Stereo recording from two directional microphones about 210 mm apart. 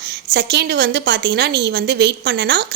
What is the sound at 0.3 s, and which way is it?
A woman's voice, 55° right (ahead or behind).